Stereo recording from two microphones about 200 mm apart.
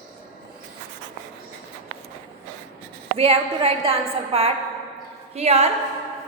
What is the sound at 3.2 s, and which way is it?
A woman's voice, 30° right (ahead or behind).